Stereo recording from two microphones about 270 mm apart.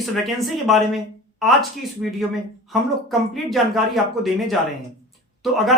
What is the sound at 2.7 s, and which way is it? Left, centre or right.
Speech, centre.